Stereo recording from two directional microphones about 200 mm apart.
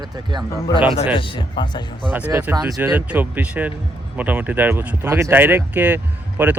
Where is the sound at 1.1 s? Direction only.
25° left (ahead or behind).